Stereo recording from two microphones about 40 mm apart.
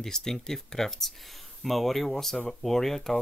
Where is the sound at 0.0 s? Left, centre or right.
Centre.